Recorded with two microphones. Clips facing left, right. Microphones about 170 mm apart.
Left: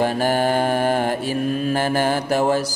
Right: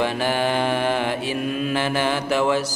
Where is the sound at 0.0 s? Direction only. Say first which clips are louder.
Left 3 dB; 45° left (ahead or behind).